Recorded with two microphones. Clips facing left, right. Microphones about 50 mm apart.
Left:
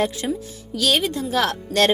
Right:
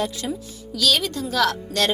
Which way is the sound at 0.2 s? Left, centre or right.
Left.